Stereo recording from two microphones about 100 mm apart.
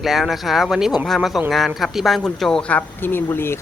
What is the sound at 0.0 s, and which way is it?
Speech, centre (ahead or behind).